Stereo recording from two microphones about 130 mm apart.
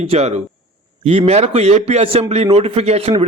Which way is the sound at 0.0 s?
55° right (ahead or behind).